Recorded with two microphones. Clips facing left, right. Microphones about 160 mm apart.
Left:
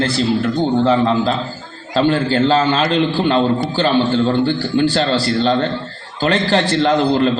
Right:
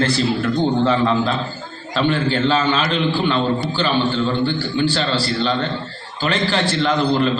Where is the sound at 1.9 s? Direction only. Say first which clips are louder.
Left 4 dB; 40° left (ahead or behind).